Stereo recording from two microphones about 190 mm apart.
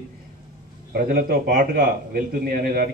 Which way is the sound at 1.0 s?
50° right (ahead or behind).